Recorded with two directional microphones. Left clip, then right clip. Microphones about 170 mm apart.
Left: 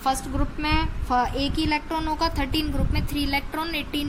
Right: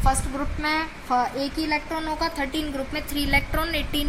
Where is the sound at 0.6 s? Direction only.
25° left (ahead or behind).